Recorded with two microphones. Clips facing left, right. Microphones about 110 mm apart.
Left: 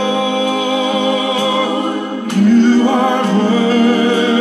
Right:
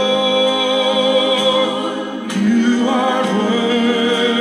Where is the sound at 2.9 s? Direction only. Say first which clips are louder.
Left 2 dB; 50° left (ahead or behind).